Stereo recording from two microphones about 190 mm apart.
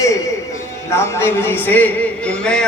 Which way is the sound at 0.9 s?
15° left (ahead or behind).